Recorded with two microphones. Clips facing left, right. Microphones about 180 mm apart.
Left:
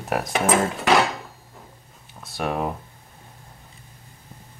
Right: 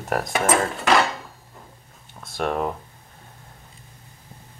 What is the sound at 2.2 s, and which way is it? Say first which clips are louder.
Speech: right 1 dB; centre (ahead or behind).